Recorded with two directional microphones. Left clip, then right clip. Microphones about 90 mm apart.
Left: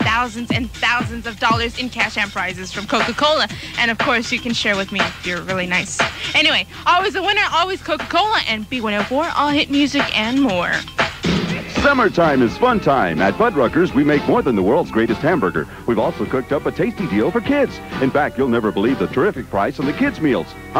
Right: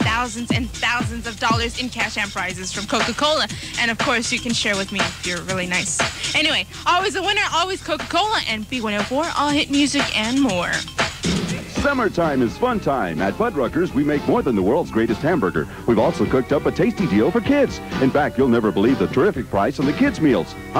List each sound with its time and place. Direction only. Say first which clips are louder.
0.0 s speech: left 3 dB; 30° left (ahead or behind)
4.7 s speech: left 3 dB; 15° left (ahead or behind)
6.3 s speech: left 5 dB; 35° left (ahead or behind)
8.9 s speech: left 3 dB; 15° left (ahead or behind)
9.3 s speech: left 3 dB; 35° left (ahead or behind)
10.2 s speech: left 2 dB; 15° left (ahead or behind)